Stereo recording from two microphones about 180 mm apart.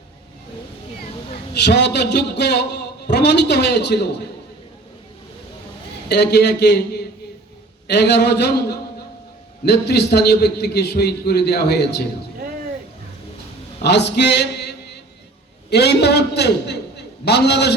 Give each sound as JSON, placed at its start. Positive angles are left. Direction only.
{"t": 1.5, "sound": "a man's voice", "side_deg": 70}
{"t": 6.1, "sound": "a man's voice", "side_deg": 65}
{"t": 13.8, "sound": "a man's voice", "side_deg": 70}
{"t": 15.7, "sound": "a man's voice", "side_deg": 65}